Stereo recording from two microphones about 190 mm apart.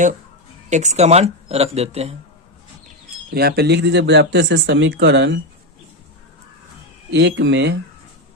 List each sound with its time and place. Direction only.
0.7 s speech: 40° right (ahead or behind)
3.3 s speech: 55° right (ahead or behind)
7.1 s speech: 65° right (ahead or behind)